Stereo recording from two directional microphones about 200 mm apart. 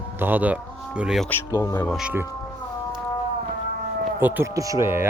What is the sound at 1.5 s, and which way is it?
Speech, 15° left (ahead or behind).